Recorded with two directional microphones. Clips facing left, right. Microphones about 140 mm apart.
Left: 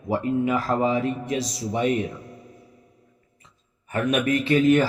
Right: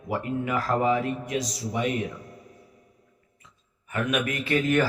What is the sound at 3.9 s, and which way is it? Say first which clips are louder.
Speech: left 5 dB; 35° left (ahead or behind).